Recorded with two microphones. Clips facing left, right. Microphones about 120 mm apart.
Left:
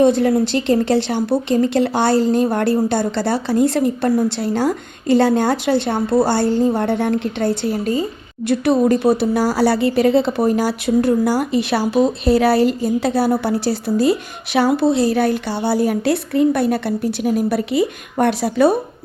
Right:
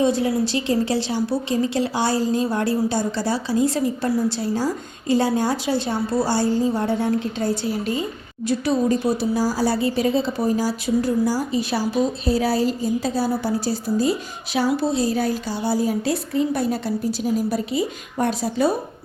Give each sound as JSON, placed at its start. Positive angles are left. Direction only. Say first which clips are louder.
{"t": 0.0, "sound": "speech", "louder": "left 6 dB", "side_deg": 60}